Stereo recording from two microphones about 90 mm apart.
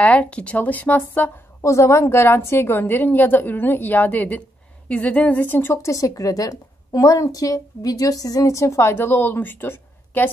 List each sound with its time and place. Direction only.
0.0 s speech: 15° left (ahead or behind)
1.6 s a woman's voice: 35° left (ahead or behind)